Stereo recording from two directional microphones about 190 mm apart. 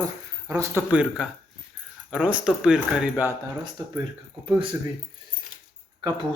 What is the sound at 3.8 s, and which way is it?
Speech, 20° right (ahead or behind).